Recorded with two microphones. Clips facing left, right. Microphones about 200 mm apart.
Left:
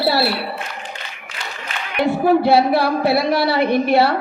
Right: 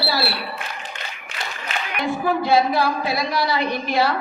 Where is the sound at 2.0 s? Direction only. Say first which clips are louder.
Left 7 dB; 65° left (ahead or behind).